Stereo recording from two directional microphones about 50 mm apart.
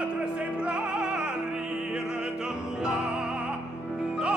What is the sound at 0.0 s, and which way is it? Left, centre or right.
Opera, right.